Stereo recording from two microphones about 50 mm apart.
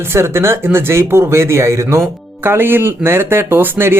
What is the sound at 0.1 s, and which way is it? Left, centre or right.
Speech, right.